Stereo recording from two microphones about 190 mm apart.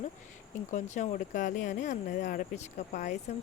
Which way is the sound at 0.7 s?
40° left (ahead or behind).